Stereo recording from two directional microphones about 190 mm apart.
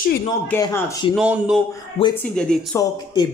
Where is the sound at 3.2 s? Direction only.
20° left (ahead or behind).